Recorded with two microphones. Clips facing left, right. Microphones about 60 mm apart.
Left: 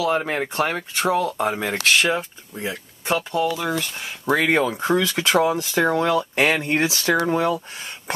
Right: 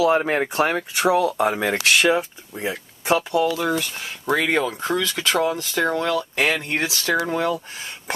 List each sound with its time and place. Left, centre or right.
0.0 s speech: centre
4.5 s speech: centre
7.2 s speech: centre